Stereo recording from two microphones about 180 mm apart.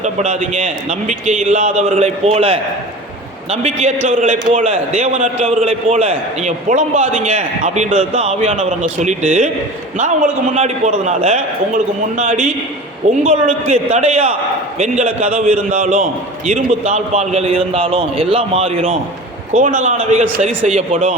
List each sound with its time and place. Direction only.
0.0 s a man's voice: 40° right (ahead or behind)
10.5 s a man's voice: 40° right (ahead or behind)
19.5 s a man's voice: 45° right (ahead or behind)